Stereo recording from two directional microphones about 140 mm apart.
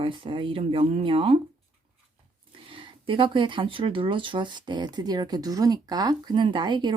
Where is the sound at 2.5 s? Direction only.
40° right (ahead or behind).